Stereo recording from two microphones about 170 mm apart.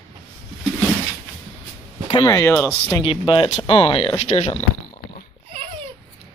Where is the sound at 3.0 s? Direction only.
30° left (ahead or behind).